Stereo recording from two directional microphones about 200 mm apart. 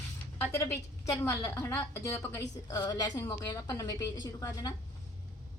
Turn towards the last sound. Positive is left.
turn(degrees=15)  # may be behind; listen again after turning